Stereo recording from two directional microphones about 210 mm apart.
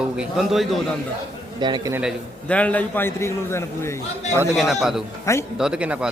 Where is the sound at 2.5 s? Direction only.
5° left (ahead or behind).